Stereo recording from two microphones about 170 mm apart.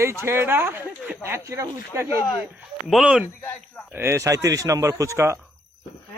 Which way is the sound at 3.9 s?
15° right (ahead or behind).